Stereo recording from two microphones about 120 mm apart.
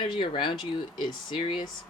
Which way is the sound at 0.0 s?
45° left (ahead or behind).